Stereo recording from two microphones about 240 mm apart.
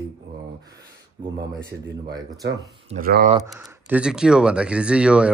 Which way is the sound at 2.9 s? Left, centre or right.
Right.